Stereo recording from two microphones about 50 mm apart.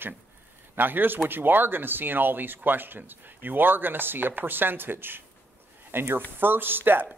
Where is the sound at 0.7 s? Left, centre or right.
Right.